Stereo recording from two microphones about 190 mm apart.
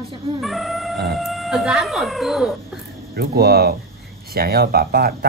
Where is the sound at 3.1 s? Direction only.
55° right (ahead or behind).